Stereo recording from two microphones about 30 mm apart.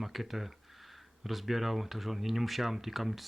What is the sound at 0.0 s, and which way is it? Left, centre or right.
Speech, centre.